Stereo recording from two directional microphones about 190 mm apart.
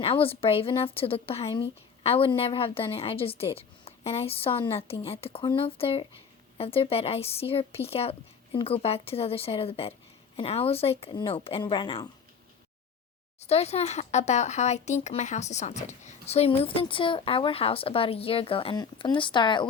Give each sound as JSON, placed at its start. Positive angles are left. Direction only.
{"t": 0.0, "sound": "a woman's voice", "side_deg": 30}
{"t": 13.4, "sound": "speech", "side_deg": 35}